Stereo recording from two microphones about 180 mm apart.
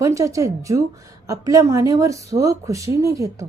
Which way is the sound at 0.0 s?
15° right (ahead or behind).